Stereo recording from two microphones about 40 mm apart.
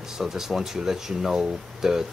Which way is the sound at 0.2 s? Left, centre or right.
Centre.